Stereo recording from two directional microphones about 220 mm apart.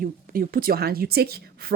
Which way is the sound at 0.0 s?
40° right (ahead or behind).